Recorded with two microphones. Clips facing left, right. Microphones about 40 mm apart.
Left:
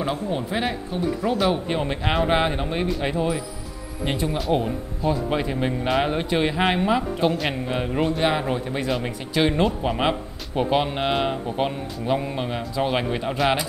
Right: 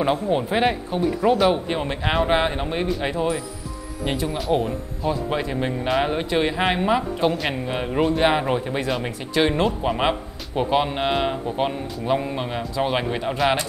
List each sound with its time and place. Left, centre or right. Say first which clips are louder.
0.0 s speech: right 5 dB; right
1.0 s a man's voice: right 4 dB; centre